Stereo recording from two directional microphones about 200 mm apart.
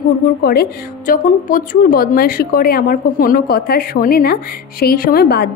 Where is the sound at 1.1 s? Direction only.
45° left (ahead or behind).